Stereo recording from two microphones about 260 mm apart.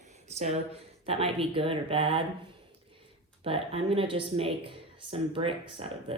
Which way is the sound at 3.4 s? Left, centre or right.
Right.